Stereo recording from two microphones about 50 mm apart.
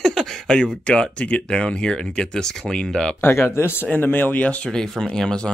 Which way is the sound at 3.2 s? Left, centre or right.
Left.